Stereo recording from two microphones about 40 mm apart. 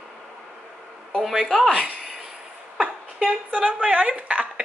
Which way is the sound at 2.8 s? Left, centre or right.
Right.